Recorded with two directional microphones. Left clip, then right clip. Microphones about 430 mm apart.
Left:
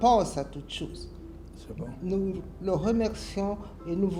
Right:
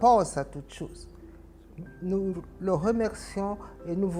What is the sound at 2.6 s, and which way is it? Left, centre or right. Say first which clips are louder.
A woman's voice: right 1 dB; right.